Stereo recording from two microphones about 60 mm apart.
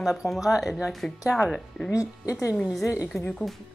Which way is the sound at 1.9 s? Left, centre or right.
Left.